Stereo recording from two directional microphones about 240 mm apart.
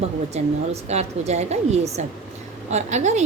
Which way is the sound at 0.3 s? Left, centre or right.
Right.